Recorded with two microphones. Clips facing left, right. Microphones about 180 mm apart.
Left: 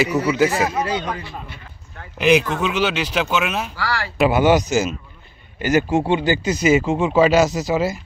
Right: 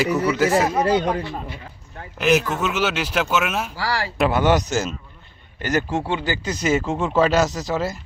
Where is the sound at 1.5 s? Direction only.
30° right (ahead or behind).